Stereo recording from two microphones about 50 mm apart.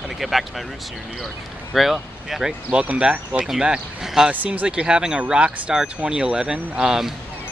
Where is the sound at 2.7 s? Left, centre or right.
Right.